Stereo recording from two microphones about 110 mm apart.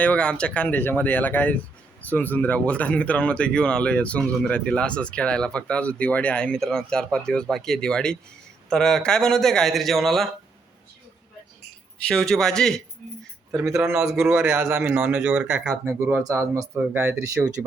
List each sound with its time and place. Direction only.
0.0 s a man's voice: 10° left (ahead or behind)
12.0 s a man's voice: 5° left (ahead or behind)
13.5 s speech: 30° right (ahead or behind)
13.8 s a man's voice: 5° right (ahead or behind)
14.3 s speech: 20° right (ahead or behind)
15.8 s speech: 25° right (ahead or behind)
17.3 s speech: 10° right (ahead or behind)